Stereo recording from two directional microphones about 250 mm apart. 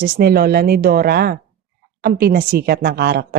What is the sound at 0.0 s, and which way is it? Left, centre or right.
Speech, right.